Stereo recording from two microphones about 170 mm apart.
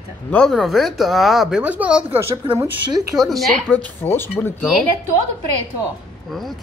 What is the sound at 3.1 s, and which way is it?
Speech, centre (ahead or behind).